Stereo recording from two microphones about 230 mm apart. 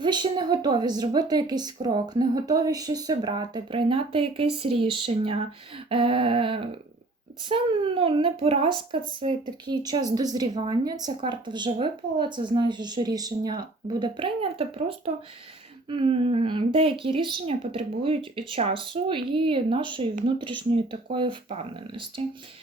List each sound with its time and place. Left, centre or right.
0.0 s speech: centre